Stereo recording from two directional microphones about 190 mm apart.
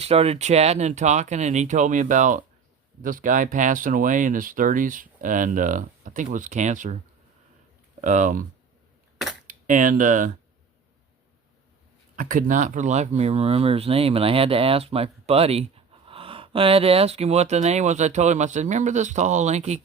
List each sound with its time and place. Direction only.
0.0 s speech: 30° right (ahead or behind)
8.0 s speech: 40° right (ahead or behind)
9.5 s speech: 45° right (ahead or behind)
12.1 s speech: 45° right (ahead or behind)